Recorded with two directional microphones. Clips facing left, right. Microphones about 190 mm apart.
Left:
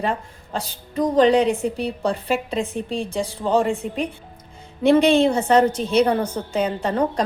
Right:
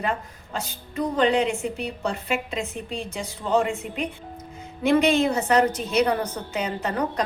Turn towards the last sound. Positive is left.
turn(degrees=30)  # may be behind; listen again after turning